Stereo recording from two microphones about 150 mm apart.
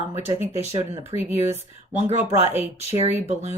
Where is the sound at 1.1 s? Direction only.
15° right (ahead or behind).